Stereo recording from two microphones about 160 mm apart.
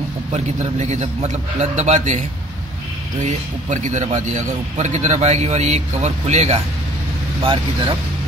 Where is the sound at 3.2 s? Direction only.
50° right (ahead or behind).